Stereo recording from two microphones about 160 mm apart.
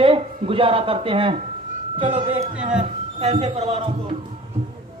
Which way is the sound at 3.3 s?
40° right (ahead or behind).